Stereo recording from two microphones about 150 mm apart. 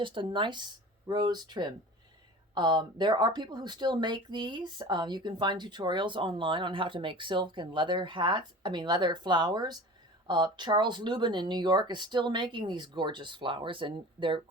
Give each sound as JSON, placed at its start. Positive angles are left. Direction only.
{"t": 0.0, "sound": "speech", "side_deg": -35}